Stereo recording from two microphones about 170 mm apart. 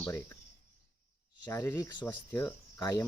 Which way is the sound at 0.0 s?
15° left (ahead or behind).